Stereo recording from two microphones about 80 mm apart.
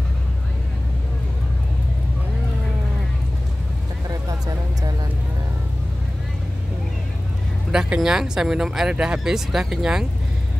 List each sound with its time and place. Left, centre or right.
4.1 s music: right
7.7 s speech: centre